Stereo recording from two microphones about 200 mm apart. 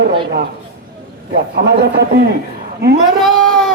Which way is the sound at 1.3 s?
50° right (ahead or behind).